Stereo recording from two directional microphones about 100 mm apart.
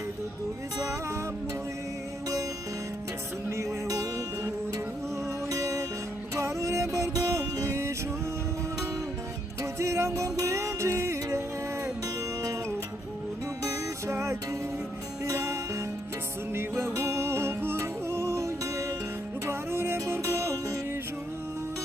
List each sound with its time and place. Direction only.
0.8 s music: 35° right (ahead or behind)
3.5 s music: 30° right (ahead or behind)
5.5 s music: 35° right (ahead or behind)
9.7 s music: 30° right (ahead or behind)
13.6 s music: 30° right (ahead or behind)